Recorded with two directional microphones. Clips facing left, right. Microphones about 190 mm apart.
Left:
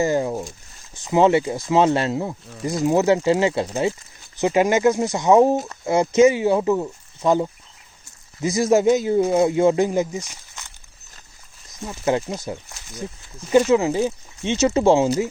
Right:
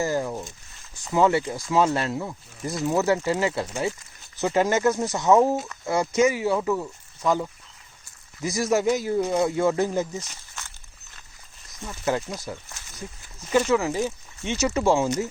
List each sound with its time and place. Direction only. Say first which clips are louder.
0.0 s a man's voice: left 5 dB; 20° left (ahead or behind)
11.9 s a man's voice: left 4 dB; 20° left (ahead or behind)
13.7 s a man's voice: left 5 dB; 20° left (ahead or behind)